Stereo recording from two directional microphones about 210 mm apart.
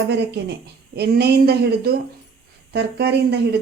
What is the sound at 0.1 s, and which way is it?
Speech, 55° right (ahead or behind).